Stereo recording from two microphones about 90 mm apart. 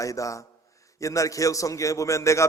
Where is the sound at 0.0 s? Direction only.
40° left (ahead or behind).